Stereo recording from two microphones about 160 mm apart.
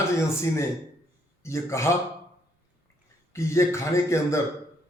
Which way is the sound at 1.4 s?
15° left (ahead or behind).